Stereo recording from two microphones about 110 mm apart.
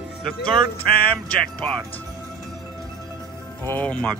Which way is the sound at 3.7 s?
15° left (ahead or behind).